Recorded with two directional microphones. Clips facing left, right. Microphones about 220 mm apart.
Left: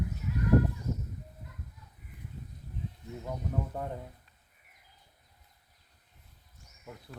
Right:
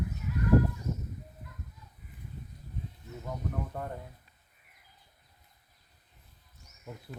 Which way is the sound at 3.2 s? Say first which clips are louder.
Left 1 dB; 15° left (ahead or behind).